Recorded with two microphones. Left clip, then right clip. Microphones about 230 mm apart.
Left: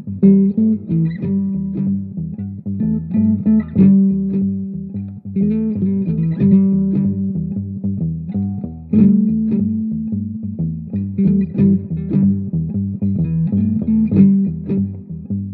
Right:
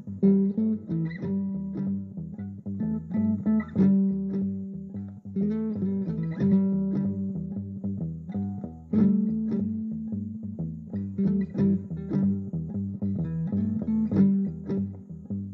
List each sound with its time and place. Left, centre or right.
0.2 s music: left